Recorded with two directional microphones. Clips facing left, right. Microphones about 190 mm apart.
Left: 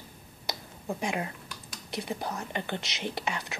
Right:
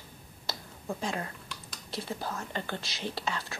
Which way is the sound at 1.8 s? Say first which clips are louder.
Left 2 dB; 15° left (ahead or behind).